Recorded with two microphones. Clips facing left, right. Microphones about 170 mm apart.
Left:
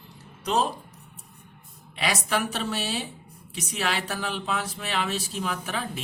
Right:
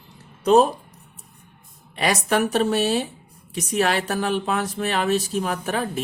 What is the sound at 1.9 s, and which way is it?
Speech, 45° right (ahead or behind).